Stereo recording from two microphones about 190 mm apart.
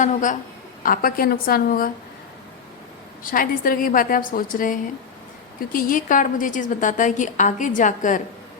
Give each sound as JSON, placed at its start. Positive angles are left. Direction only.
{"t": 0.0, "sound": "a woman's voice", "side_deg": 40}
{"t": 3.2, "sound": "a woman's voice", "side_deg": 45}